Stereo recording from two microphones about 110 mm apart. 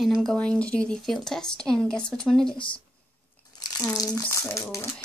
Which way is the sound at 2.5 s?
50° left (ahead or behind).